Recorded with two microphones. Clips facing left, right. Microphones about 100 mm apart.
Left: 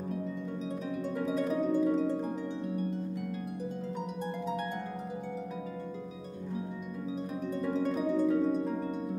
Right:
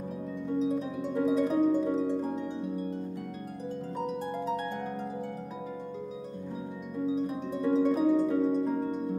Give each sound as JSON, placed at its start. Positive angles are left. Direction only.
{"t": 0.6, "sound": "harp", "side_deg": -5}
{"t": 7.1, "sound": "harp", "side_deg": 0}